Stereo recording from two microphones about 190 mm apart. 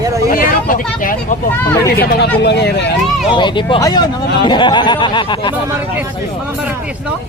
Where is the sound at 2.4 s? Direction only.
60° left (ahead or behind).